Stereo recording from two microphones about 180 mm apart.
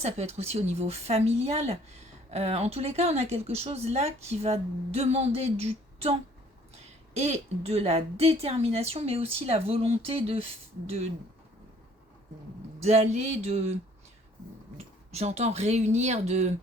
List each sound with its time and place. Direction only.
0.0 s a woman's voice: 35° right (ahead or behind)
7.2 s a woman's voice: 35° right (ahead or behind)
12.8 s a woman's voice: 35° right (ahead or behind)
14.8 s a woman's voice: 35° right (ahead or behind)